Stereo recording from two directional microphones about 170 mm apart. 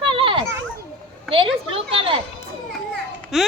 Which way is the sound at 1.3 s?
30° right (ahead or behind).